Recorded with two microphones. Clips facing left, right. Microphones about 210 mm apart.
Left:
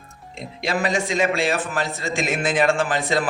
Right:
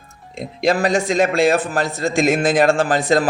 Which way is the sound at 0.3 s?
40° right (ahead or behind).